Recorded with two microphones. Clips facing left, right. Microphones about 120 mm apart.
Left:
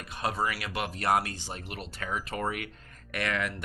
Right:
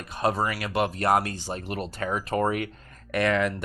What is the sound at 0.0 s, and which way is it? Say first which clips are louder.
Speech: right 5 dB; 40° right (ahead or behind).